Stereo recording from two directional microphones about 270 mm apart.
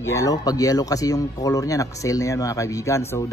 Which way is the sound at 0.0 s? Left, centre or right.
Centre.